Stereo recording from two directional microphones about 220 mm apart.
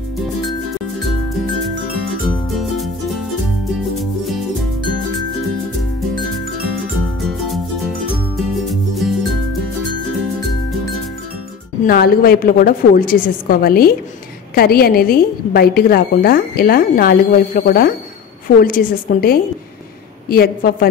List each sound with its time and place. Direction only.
8.4 s music: centre (ahead or behind)
11.8 s a woman's voice: 45° left (ahead or behind)